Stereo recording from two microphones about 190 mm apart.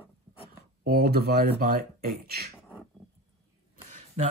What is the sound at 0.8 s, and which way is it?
Speech, 55° right (ahead or behind).